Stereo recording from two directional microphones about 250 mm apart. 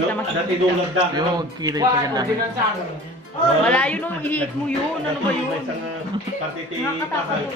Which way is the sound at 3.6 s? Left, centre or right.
Centre.